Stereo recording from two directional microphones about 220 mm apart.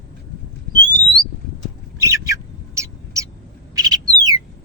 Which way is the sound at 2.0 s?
15° right (ahead or behind).